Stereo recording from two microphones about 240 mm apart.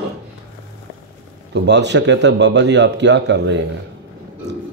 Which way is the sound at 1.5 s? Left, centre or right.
Right.